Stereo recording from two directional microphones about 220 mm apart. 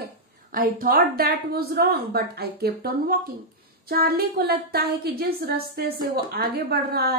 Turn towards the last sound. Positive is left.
turn(degrees=-45)  # may be behind; listen again after turning